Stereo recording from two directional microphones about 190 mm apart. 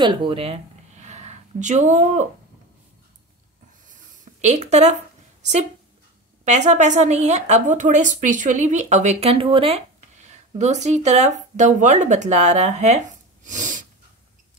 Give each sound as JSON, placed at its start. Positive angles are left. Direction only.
{"t": 0.0, "sound": "speech", "side_deg": -25}
{"t": 3.9, "sound": "a sound", "side_deg": -40}
{"t": 5.4, "sound": "a woman's voice", "side_deg": -35}